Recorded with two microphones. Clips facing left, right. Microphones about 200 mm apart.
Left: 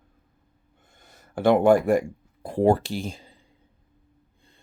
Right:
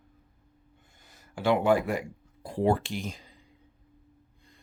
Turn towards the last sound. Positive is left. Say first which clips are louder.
# left 4 dB
turn(degrees=30)  # may be behind; listen again after turning